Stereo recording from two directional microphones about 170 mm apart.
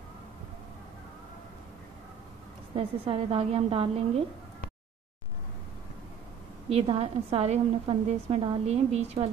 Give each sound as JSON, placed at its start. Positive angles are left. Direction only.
{"t": 2.7, "sound": "a woman's voice", "side_deg": -35}
{"t": 6.7, "sound": "a woman's voice", "side_deg": -35}